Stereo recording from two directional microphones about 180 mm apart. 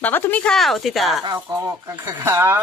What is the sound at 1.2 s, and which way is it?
Speech, 20° right (ahead or behind).